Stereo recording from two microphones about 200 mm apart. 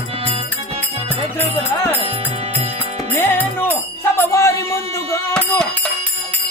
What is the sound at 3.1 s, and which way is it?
Music, 10° left (ahead or behind).